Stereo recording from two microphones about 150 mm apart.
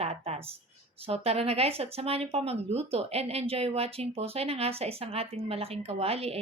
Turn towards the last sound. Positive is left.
turn(degrees=-40)  # may be behind; listen again after turning